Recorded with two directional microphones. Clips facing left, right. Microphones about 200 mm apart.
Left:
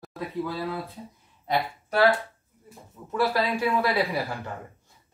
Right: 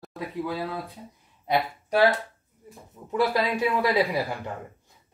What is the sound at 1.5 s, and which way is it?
Speech, 15° right (ahead or behind).